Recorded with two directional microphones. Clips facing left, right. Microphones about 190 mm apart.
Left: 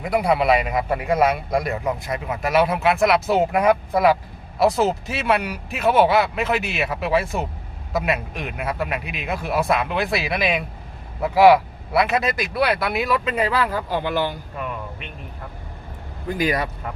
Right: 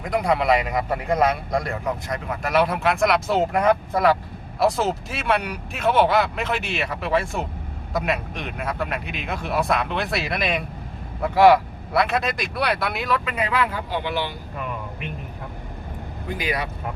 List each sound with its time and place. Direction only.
0.0 s a man's voice: 5° left (ahead or behind)
13.2 s speech: 35° left (ahead or behind)
16.4 s speech: 45° left (ahead or behind)